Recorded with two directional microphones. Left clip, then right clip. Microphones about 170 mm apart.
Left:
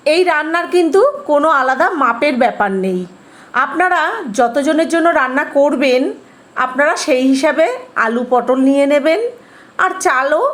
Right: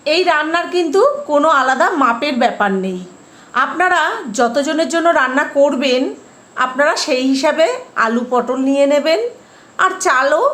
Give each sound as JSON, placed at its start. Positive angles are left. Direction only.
{"t": 0.0, "sound": "a woman's voice", "side_deg": 20}